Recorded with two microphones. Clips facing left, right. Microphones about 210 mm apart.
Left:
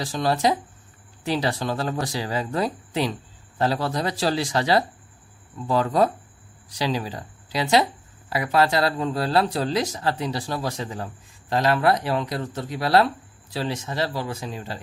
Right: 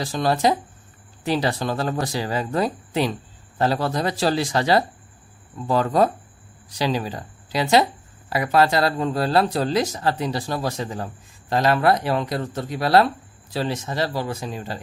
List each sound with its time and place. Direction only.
0.0 s speech: 50° right (ahead or behind)